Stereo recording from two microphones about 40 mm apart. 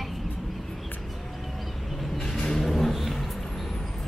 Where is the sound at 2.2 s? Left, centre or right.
Centre.